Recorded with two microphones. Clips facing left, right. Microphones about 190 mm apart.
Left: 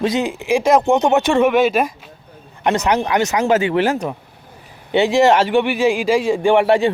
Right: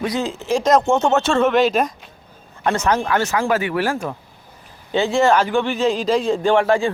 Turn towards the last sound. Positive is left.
turn(degrees=20)  # may be behind; listen again after turning